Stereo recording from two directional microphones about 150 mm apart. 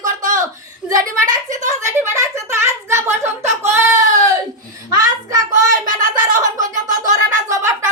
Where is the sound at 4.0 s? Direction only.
55° right (ahead or behind).